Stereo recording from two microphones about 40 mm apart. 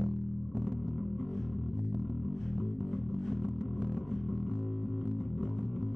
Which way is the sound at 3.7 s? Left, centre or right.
Right.